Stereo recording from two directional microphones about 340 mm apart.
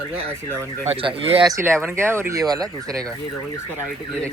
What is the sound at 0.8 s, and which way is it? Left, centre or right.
Speech, centre.